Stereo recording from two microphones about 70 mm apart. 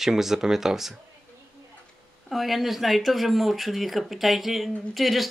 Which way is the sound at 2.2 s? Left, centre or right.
Centre.